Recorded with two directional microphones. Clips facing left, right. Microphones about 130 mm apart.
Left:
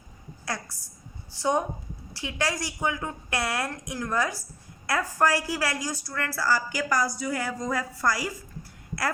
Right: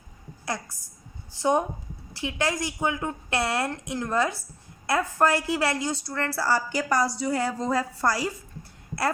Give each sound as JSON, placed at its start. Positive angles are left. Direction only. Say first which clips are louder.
{"t": 0.4, "sound": "a woman's voice", "louder": "right 2 dB", "side_deg": -20}